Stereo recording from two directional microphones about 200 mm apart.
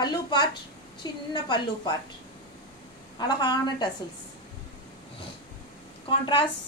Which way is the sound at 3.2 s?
20° left (ahead or behind).